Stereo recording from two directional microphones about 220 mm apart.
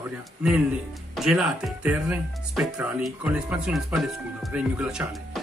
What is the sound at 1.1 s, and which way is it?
Speech, centre (ahead or behind).